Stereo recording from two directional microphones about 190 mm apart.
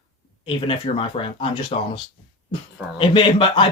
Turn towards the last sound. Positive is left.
turn(degrees=25)  # may be behind; listen again after turning